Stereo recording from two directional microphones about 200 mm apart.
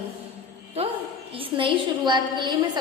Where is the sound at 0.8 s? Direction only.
30° right (ahead or behind).